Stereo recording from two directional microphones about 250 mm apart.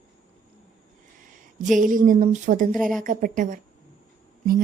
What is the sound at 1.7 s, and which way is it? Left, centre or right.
A woman's voice, right.